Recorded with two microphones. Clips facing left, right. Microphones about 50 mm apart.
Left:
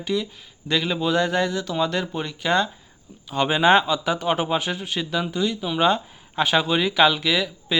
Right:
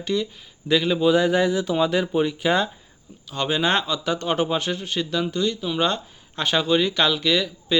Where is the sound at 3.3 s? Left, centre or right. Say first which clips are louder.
Left 5 dB; centre.